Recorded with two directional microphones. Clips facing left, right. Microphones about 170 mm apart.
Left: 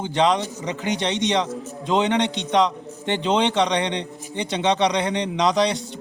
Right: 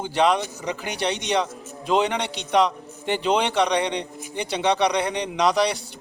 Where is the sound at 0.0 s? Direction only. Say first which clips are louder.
Left 1 dB; 25° left (ahead or behind).